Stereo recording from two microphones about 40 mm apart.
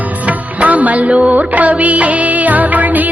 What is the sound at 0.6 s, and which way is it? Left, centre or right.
Music, right.